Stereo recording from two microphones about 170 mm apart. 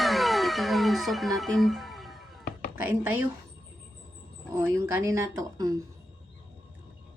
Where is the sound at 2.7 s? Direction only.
15° right (ahead or behind).